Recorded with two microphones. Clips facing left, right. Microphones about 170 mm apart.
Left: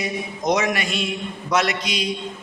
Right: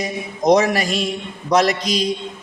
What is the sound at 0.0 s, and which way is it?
Speech, 35° right (ahead or behind).